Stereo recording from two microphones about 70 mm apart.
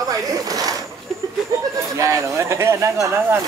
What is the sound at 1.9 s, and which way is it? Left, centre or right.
Speech, right.